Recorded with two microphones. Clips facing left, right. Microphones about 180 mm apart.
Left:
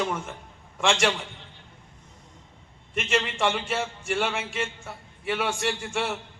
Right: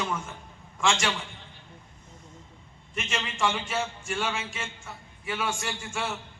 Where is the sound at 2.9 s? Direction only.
60° left (ahead or behind).